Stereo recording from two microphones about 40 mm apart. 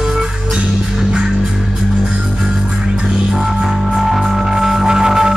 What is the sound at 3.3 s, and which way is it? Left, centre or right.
Music, centre.